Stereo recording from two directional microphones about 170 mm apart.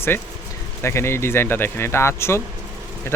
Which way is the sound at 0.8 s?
15° left (ahead or behind).